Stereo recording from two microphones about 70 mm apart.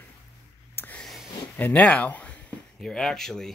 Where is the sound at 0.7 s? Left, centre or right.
Left.